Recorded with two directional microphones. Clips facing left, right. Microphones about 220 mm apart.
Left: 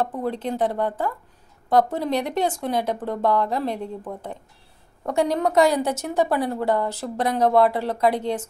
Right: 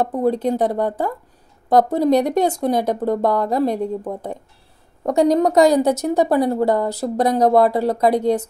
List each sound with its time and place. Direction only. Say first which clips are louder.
0.0 s a woman's voice: right 7 dB; 40° right (ahead or behind)